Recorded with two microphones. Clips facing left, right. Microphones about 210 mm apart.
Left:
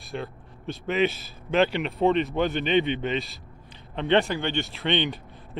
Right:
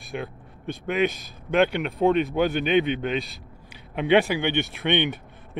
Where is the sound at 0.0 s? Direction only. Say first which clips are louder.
Right 1 dB; centre (ahead or behind).